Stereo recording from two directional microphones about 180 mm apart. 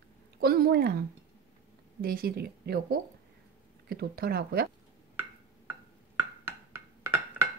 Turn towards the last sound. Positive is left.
turn(degrees=-15)  # may be behind; listen again after turning